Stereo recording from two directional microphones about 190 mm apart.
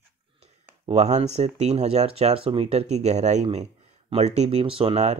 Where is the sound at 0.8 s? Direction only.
35° right (ahead or behind).